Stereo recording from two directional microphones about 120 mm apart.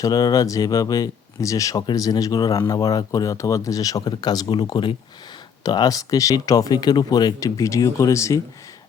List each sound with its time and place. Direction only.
0.0 s speech: 35° left (ahead or behind)